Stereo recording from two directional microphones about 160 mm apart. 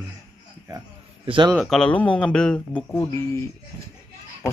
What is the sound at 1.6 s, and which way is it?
Speech, 5° left (ahead or behind).